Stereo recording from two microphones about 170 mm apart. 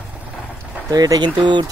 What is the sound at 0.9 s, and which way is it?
Speech, 20° right (ahead or behind).